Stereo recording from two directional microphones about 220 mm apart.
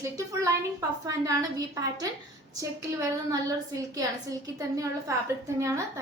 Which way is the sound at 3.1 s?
15° right (ahead or behind).